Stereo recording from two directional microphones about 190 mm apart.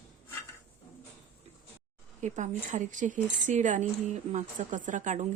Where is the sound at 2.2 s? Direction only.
40° right (ahead or behind).